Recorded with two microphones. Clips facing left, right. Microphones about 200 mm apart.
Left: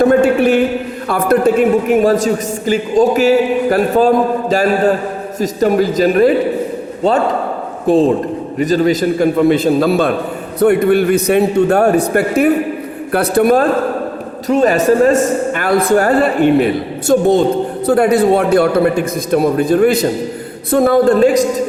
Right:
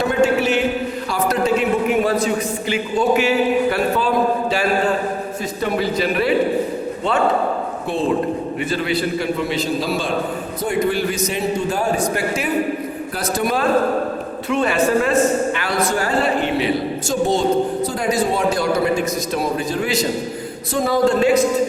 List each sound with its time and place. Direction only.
0.0 s a sound: 55° left (ahead or behind)
1.0 s a man's voice: 55° left (ahead or behind)
8.5 s a man's voice: 40° left (ahead or behind)
14.4 s a man's voice: 40° left (ahead or behind)
15.5 s a man's voice: 55° left (ahead or behind)